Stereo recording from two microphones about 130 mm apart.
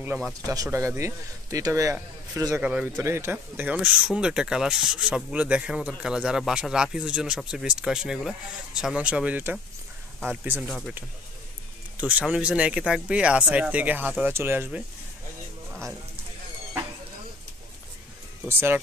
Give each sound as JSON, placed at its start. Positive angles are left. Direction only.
{"t": 0.0, "sound": "speech", "side_deg": -15}
{"t": 2.6, "sound": "speech", "side_deg": -10}
{"t": 3.0, "sound": "speech", "side_deg": -20}
{"t": 10.7, "sound": "speech", "side_deg": 0}
{"t": 12.0, "sound": "speech", "side_deg": -10}
{"t": 18.4, "sound": "speech", "side_deg": -15}